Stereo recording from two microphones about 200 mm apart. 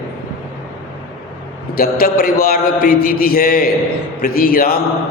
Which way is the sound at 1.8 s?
50° left (ahead or behind).